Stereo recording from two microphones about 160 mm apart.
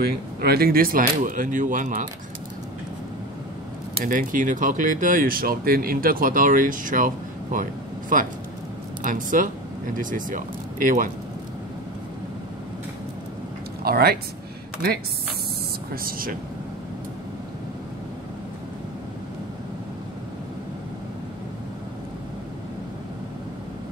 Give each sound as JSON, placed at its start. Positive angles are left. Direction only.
{"t": 0.0, "sound": "speech", "side_deg": -75}
{"t": 4.0, "sound": "speech", "side_deg": -55}
{"t": 13.8, "sound": "speech", "side_deg": -70}
{"t": 15.9, "sound": "speech", "side_deg": -65}